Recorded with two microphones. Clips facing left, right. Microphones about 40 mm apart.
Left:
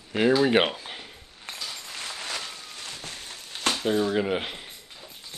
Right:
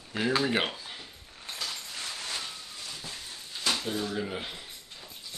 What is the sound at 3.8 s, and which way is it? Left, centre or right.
Speech, left.